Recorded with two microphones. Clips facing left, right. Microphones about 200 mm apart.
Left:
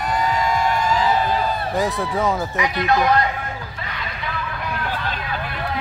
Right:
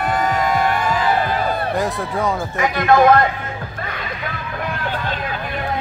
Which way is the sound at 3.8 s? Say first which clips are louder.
Right 3 dB; 50° right (ahead or behind).